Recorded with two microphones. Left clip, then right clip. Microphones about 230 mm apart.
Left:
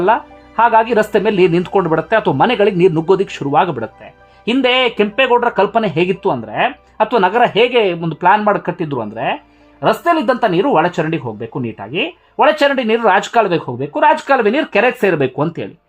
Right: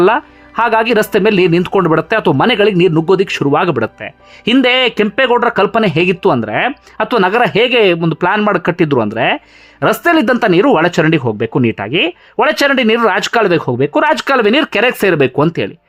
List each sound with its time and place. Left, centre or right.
0.0 s speech: centre